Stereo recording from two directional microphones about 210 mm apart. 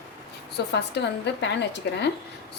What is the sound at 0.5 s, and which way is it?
Speech, 55° left (ahead or behind).